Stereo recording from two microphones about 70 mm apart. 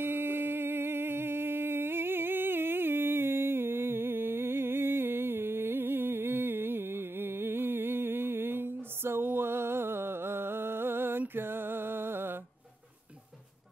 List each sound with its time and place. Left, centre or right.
0.0 s music: right